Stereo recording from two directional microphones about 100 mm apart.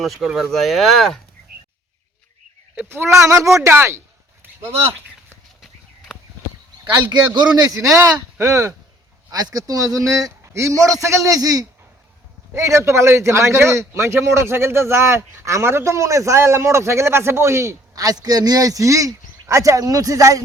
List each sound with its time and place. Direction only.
0.0 s speech: centre (ahead or behind)
3.2 s a man's voice: 30° right (ahead or behind)
4.6 s speech: 70° right (ahead or behind)
6.9 s a man's voice: 45° right (ahead or behind); by 8.7 s 30° right (ahead or behind)
9.3 s a man's voice: 40° right (ahead or behind)